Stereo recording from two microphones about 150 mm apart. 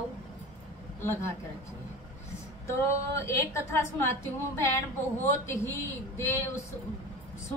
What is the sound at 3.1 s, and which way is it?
A woman's voice, 20° left (ahead or behind).